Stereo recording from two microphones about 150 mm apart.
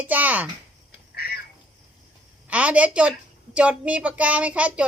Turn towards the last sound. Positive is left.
turn(degrees=-10)  # may be behind; listen again after turning